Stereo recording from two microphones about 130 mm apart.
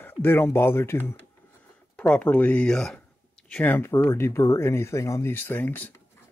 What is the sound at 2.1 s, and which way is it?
Speech, 10° left (ahead or behind).